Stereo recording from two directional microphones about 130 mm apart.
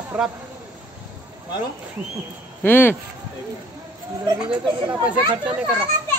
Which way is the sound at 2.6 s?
15° left (ahead or behind).